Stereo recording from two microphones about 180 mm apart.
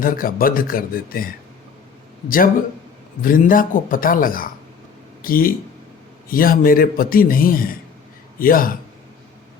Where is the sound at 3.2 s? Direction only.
50° left (ahead or behind).